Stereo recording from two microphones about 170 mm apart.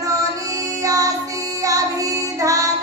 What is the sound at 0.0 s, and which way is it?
Child singing, 20° right (ahead or behind).